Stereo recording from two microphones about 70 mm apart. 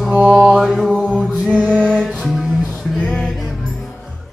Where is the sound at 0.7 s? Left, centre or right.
Centre.